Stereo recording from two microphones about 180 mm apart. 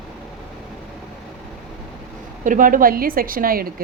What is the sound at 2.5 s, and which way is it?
A woman's voice, 50° right (ahead or behind).